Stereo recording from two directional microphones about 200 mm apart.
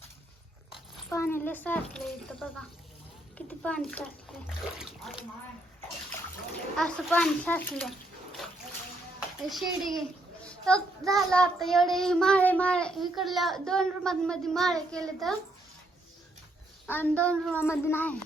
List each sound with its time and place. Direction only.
1.1 s speech: 10° left (ahead or behind)
3.3 s child singing: 5° left (ahead or behind)
6.7 s child singing: 5° left (ahead or behind)
9.5 s child singing: centre (ahead or behind)
10.4 s a sound: 5° left (ahead or behind)
11.3 s child singing: 5° left (ahead or behind)
16.8 s a woman's voice: 10° left (ahead or behind)